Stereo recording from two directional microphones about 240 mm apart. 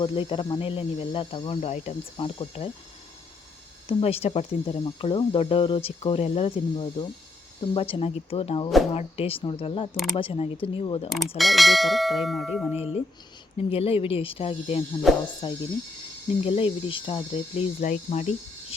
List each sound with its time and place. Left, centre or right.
0.0 s speech: left
3.8 s speech: left
11.3 s bell: centre
13.7 s speech: left
15.1 s bell: centre
15.4 s speech: centre